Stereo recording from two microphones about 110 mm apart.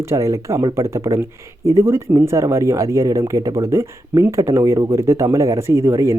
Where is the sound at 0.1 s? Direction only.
25° right (ahead or behind).